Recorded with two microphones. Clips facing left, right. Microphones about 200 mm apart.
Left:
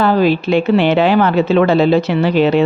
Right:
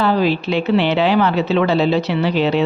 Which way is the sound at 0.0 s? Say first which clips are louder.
Left 4 dB; 50° left (ahead or behind).